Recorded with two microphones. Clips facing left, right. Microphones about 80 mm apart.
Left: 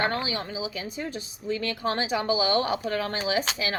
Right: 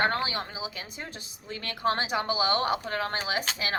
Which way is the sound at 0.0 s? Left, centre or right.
Right.